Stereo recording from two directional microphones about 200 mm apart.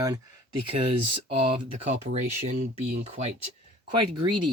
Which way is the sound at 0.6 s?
25° right (ahead or behind).